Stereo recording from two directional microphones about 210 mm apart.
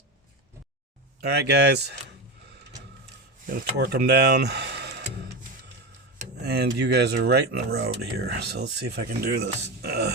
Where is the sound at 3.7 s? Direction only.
45° right (ahead or behind).